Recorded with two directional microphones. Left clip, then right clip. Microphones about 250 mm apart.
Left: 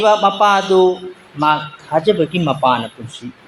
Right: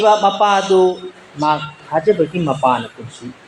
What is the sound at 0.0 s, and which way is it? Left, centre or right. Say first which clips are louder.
Speech: even; left.